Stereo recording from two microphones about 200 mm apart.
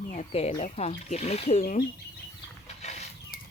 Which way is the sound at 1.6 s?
45° left (ahead or behind).